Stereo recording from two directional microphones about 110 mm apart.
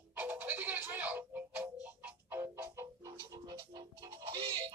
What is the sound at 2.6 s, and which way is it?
Music, 35° right (ahead or behind).